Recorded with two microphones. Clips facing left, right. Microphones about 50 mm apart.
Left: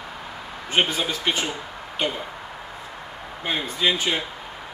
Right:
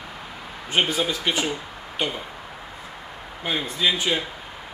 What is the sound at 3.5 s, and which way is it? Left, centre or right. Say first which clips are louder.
Speech: even; left.